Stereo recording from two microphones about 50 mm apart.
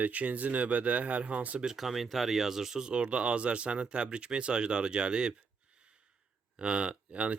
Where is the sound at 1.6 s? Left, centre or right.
Centre.